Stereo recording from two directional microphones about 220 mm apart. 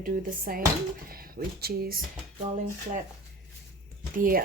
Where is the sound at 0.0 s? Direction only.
40° right (ahead or behind).